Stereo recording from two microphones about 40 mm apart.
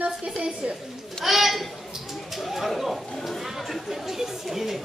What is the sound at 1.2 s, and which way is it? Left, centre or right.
Speech, centre.